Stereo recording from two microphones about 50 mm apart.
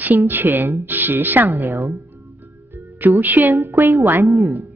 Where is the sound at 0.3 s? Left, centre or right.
Right.